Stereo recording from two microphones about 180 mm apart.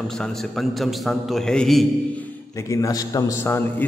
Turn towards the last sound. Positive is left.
turn(degrees=15)  # may be behind; listen again after turning